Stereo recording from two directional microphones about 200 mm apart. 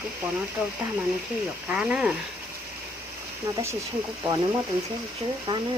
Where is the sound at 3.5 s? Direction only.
15° right (ahead or behind).